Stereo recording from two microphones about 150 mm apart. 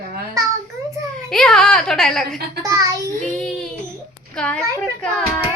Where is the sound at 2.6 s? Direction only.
20° right (ahead or behind).